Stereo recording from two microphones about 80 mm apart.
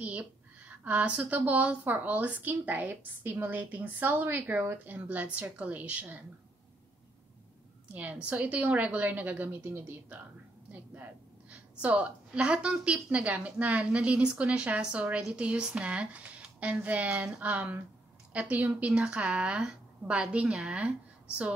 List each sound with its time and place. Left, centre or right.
0.0 s a woman's voice: centre
7.9 s a woman's voice: centre
11.8 s a woman's voice: centre